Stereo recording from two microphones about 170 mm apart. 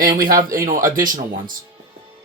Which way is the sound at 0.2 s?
55° right (ahead or behind).